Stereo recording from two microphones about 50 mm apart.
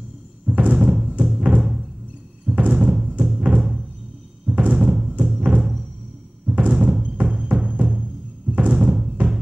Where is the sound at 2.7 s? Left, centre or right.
Centre.